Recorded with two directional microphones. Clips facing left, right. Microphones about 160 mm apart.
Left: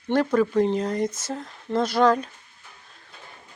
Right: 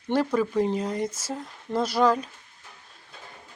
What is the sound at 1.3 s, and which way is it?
Speech, 5° right (ahead or behind).